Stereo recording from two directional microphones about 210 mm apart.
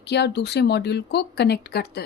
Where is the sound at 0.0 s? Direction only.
55° left (ahead or behind).